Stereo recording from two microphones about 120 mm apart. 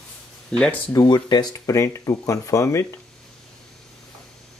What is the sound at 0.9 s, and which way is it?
Speech, 35° left (ahead or behind).